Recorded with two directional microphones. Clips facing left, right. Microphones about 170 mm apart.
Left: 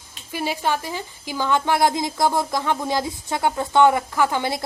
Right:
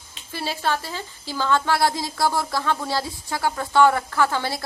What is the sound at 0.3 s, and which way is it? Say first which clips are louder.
A woman's voice: left 2 dB; 15° left (ahead or behind).